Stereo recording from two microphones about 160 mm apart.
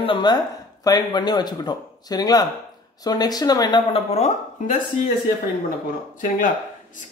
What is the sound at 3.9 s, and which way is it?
Speech, 40° left (ahead or behind).